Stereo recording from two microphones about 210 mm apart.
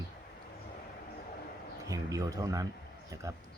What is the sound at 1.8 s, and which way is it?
Speech, 15° right (ahead or behind).